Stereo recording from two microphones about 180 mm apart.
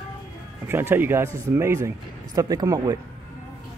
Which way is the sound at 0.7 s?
10° right (ahead or behind).